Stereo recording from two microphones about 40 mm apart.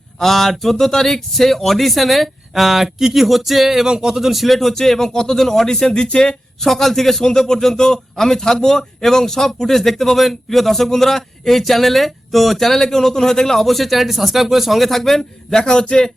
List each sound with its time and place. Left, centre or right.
0.2 s a man's voice: centre
15.6 s a man's voice: centre